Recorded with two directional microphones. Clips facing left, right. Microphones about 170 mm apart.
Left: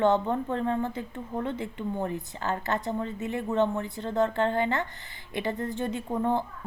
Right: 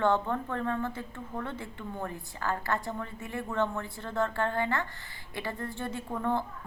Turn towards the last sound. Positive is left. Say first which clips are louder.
# left 4 dB
turn(degrees=20)  # may be behind; listen again after turning